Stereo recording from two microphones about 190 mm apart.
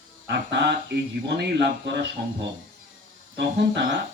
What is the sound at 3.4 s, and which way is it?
Speech, 65° right (ahead or behind).